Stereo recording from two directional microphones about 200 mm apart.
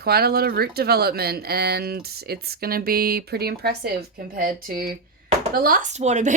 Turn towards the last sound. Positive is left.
turn(degrees=-35)  # may be behind; listen again after turning